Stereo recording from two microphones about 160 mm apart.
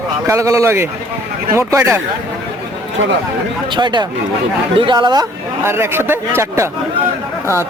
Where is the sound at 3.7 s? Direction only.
30° right (ahead or behind).